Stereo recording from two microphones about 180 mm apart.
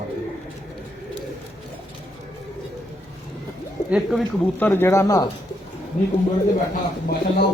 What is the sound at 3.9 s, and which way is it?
Speech, centre (ahead or behind).